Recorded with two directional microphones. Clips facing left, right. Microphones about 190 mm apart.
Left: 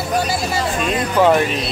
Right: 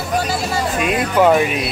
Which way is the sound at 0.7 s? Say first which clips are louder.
Right 2 dB; 5° right (ahead or behind).